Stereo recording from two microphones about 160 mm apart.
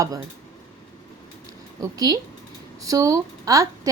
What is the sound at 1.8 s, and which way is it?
Speech, 25° right (ahead or behind).